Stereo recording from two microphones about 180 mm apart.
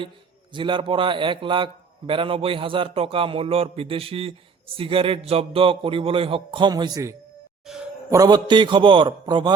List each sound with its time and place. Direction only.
0.5 s a man's voice: 25° right (ahead or behind)